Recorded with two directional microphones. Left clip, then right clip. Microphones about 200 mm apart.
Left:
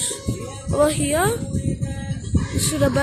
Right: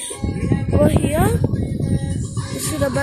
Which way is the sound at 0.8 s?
5° left (ahead or behind).